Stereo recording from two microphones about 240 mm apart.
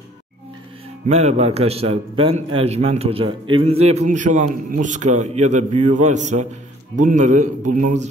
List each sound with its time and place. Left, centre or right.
1.0 s a man's voice: right